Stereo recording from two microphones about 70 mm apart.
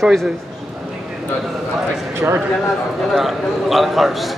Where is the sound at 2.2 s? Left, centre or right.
Right.